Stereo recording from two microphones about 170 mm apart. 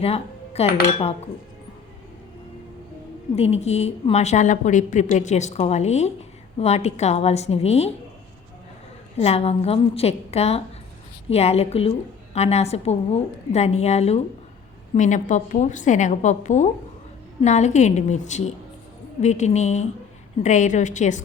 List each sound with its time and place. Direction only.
0.0 s cutlery: 35° left (ahead or behind)
3.3 s a woman's voice: 40° left (ahead or behind)
9.1 s a woman's voice: 35° left (ahead or behind)